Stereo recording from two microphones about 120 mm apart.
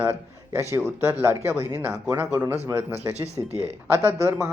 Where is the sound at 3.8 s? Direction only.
25° left (ahead or behind).